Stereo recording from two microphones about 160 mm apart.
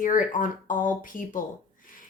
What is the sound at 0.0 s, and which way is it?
A woman's voice, 55° left (ahead or behind).